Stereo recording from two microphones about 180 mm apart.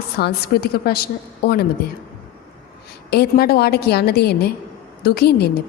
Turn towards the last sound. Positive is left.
turn(degrees=60)  # may be behind; listen again after turning